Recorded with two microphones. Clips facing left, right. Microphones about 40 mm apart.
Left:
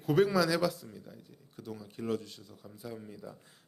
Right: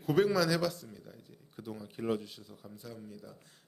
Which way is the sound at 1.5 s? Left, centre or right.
Centre.